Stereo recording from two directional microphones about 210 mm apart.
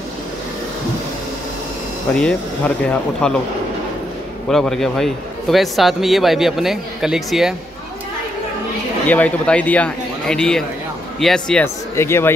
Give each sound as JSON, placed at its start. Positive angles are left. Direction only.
{"t": 2.1, "sound": "a man's voice", "side_deg": 5}
{"t": 4.5, "sound": "a man's voice", "side_deg": 0}
{"t": 9.0, "sound": "a man's voice", "side_deg": 5}